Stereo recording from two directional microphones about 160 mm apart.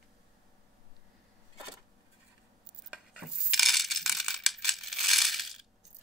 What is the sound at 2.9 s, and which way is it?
Coin, centre (ahead or behind).